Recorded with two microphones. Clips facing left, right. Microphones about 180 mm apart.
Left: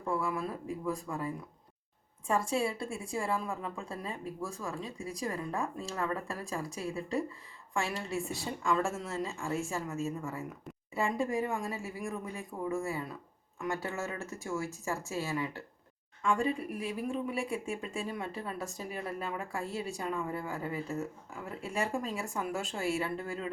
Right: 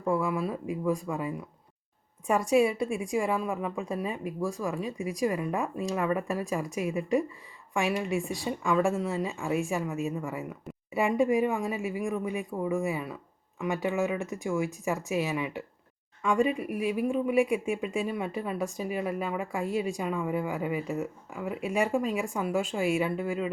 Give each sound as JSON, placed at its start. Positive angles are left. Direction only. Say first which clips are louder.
{"t": 0.1, "sound": "speech", "louder": "right 5 dB", "side_deg": -15}